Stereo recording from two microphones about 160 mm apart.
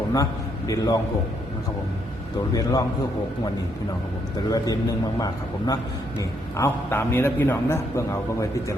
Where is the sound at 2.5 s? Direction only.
20° left (ahead or behind).